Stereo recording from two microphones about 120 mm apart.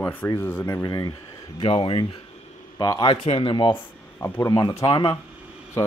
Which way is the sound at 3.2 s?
55° left (ahead or behind).